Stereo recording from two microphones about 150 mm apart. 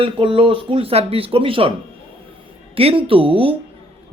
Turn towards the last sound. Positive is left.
turn(degrees=-35)  # may be behind; listen again after turning